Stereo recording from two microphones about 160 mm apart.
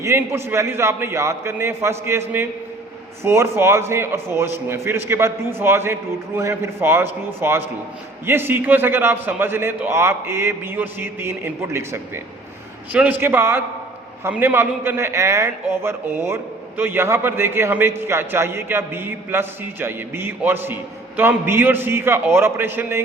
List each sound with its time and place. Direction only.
0.0 s a man's voice: 15° right (ahead or behind)